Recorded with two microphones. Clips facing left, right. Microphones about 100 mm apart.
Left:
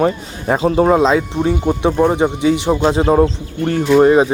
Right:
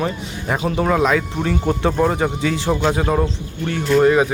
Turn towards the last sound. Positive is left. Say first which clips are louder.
# left 4 dB
turn(degrees=30)  # may be behind; listen again after turning